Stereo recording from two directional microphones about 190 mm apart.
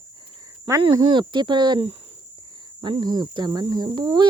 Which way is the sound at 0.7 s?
20° right (ahead or behind).